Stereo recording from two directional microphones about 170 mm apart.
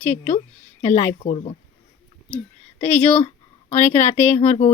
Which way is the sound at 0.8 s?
45° left (ahead or behind).